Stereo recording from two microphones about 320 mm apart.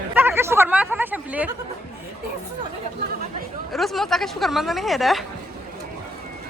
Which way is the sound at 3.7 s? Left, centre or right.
Centre.